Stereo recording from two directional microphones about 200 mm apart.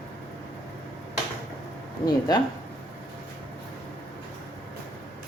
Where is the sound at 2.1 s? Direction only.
20° left (ahead or behind).